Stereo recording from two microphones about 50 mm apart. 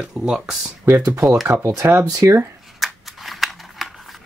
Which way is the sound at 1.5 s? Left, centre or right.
Right.